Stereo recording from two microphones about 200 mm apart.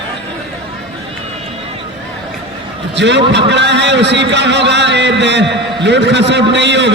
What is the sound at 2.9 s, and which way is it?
A man's voice, 60° right (ahead or behind).